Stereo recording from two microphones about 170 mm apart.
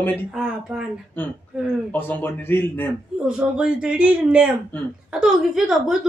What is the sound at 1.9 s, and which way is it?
Speech, 10° left (ahead or behind).